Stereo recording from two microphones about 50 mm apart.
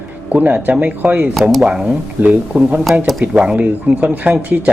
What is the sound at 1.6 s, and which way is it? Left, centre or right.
Speech, centre.